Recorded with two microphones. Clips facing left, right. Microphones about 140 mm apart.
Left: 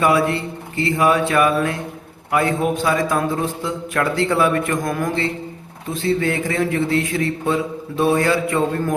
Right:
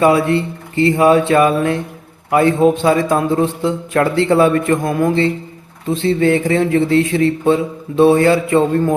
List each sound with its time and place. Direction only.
0.0 s speech: 25° right (ahead or behind)